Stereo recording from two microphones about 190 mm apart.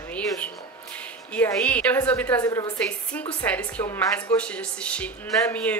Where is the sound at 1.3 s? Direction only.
5° left (ahead or behind).